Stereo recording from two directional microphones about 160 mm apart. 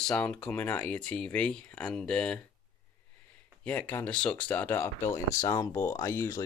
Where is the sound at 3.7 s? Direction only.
10° left (ahead or behind).